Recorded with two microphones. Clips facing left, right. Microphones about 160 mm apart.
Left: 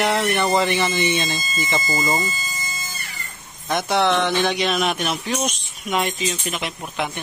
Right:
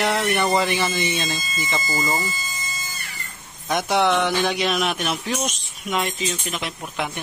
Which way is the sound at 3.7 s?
10° right (ahead or behind).